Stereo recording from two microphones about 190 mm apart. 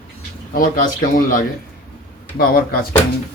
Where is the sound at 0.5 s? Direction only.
45° left (ahead or behind).